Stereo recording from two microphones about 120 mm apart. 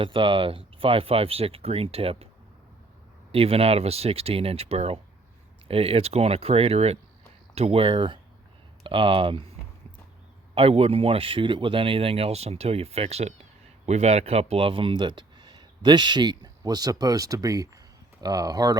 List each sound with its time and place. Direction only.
0.0 s speech: 45° right (ahead or behind)
3.3 s speech: 55° right (ahead or behind)
10.5 s speech: 55° right (ahead or behind); by 18.8 s 30° right (ahead or behind)